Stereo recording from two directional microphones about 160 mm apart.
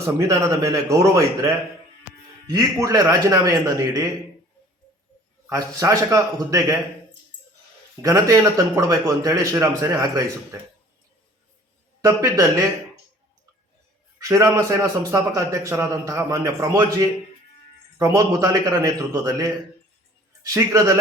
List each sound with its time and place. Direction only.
0.0 s a man's voice: 20° right (ahead or behind)
5.5 s a man's voice: 20° right (ahead or behind)
8.0 s a man's voice: 20° right (ahead or behind)
12.0 s a man's voice: 20° right (ahead or behind)
14.3 s a man's voice: 20° right (ahead or behind)
17.9 s a man's voice: 20° right (ahead or behind)